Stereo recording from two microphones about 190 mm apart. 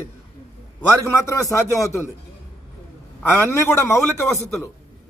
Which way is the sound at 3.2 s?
15° left (ahead or behind).